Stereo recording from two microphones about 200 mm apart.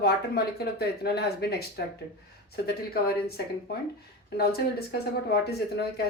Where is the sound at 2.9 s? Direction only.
50° left (ahead or behind).